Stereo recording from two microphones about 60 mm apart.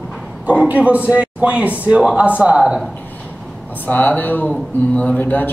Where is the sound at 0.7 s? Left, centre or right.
Right.